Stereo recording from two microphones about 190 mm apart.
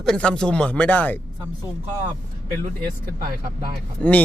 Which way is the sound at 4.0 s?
10° left (ahead or behind).